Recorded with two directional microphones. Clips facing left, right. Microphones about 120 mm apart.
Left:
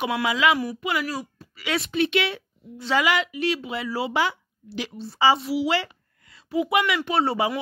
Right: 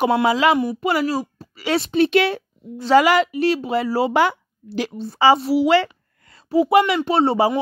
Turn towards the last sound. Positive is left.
turn(degrees=-30)  # may be behind; listen again after turning